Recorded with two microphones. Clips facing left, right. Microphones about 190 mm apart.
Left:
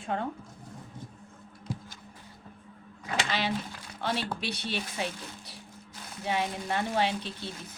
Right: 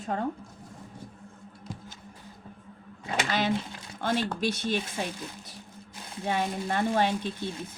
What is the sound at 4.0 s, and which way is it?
Speech, 50° right (ahead or behind).